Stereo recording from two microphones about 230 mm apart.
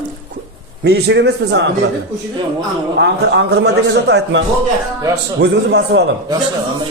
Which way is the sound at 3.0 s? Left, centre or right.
Right.